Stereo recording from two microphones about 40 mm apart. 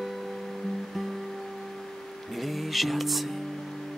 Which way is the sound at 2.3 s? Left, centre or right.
Centre.